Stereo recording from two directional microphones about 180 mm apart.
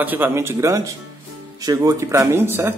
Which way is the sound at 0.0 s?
10° right (ahead or behind).